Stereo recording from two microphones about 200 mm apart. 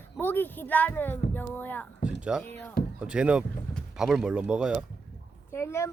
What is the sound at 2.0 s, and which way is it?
Speech, 5° right (ahead or behind).